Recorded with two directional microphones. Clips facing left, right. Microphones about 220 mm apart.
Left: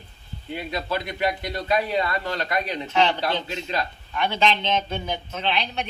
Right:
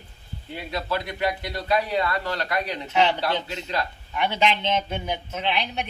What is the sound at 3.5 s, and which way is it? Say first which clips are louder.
Speech: left 1 dB; 20° left (ahead or behind).